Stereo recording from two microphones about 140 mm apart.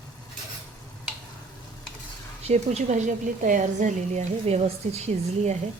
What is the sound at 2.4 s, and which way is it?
A woman's voice, 50° right (ahead or behind).